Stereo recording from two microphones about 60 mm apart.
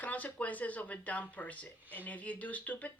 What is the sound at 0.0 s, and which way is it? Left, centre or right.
Speech, left.